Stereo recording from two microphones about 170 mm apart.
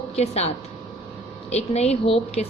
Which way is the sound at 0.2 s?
40° left (ahead or behind).